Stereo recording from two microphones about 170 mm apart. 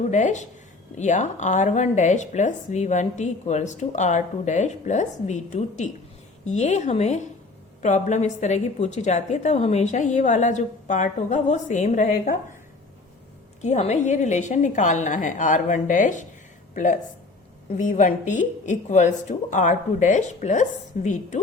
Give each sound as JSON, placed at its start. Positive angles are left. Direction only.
{"t": 0.1, "sound": "a woman's voice", "side_deg": 45}
{"t": 13.6, "sound": "a woman's voice", "side_deg": 40}